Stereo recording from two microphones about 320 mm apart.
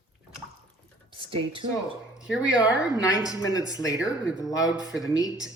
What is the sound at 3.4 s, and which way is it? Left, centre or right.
Speech, centre.